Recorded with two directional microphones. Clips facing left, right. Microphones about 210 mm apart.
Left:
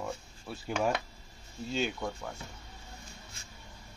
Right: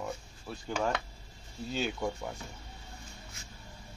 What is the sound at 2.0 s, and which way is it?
Speech, 10° right (ahead or behind).